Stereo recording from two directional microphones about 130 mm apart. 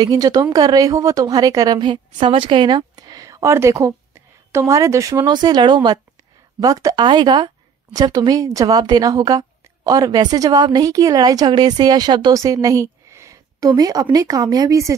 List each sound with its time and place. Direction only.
0.0 s speech: 30° right (ahead or behind)
1.8 s a woman's voice: 40° right (ahead or behind)